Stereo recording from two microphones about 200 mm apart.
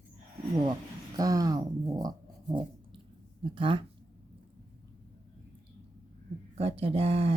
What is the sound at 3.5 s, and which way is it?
Speech, 25° right (ahead or behind).